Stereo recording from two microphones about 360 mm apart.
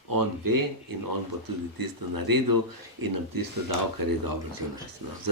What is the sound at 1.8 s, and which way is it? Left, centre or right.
A man's voice, right.